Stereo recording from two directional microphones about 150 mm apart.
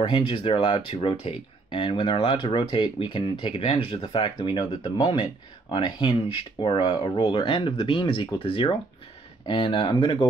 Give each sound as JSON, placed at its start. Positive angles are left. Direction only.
{"t": 0.0, "sound": "speech", "side_deg": 35}